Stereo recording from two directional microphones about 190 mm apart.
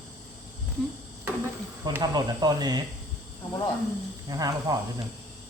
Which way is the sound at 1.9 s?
20° right (ahead or behind).